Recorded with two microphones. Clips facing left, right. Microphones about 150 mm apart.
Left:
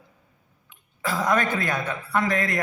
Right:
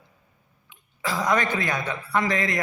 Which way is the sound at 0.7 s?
50° left (ahead or behind).